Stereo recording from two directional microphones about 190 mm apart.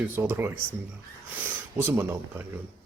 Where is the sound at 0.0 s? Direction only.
10° right (ahead or behind).